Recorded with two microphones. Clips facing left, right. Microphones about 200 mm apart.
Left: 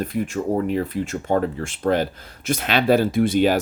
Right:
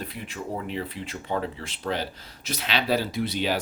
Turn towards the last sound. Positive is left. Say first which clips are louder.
# left 9 dB
turn(degrees=50)  # may be behind; listen again after turning